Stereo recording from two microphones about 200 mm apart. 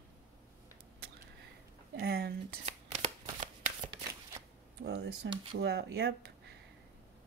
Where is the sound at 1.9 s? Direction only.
50° right (ahead or behind).